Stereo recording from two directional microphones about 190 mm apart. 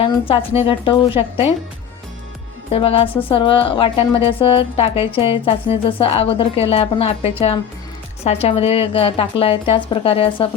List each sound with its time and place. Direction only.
0.0 s a woman's voice: 30° left (ahead or behind)
2.7 s a woman's voice: 30° left (ahead or behind)